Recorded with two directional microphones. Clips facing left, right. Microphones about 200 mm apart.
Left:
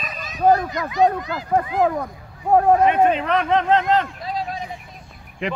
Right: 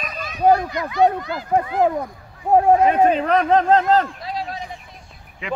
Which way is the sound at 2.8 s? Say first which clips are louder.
Right 1 dB; 35° right (ahead or behind).